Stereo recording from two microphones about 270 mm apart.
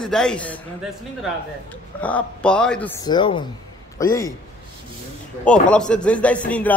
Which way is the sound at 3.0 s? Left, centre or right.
Centre.